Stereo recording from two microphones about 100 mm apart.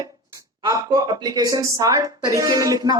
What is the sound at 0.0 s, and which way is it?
Speech, 35° right (ahead or behind).